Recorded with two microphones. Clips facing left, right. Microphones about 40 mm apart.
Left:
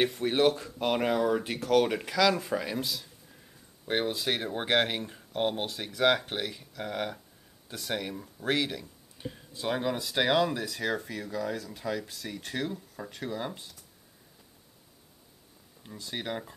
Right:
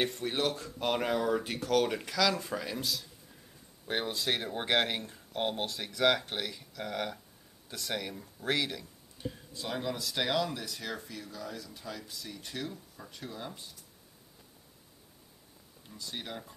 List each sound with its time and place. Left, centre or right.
0.0 s speech: centre
0.5 s speech: centre
9.6 s speech: left
10.5 s speech: left
16.0 s speech: left